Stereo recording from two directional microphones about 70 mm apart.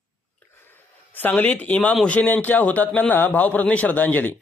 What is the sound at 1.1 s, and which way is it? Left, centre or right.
A man's voice, left.